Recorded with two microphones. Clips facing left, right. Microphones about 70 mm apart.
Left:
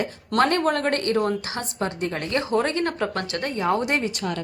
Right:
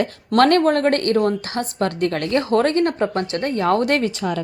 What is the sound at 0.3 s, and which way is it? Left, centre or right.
Speech, right.